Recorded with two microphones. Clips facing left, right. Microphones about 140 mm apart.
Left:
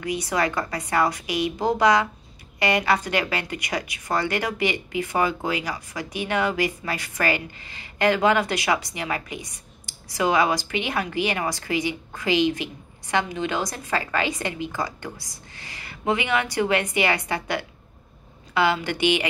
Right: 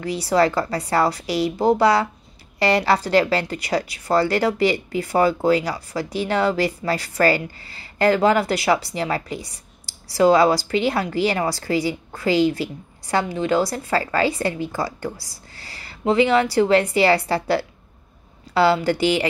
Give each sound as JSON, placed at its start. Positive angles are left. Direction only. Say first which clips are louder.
{"t": 0.0, "sound": "a woman's voice", "louder": "right 6 dB", "side_deg": -35}